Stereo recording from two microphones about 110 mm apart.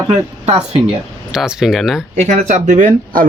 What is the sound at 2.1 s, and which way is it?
Speech, 90° right.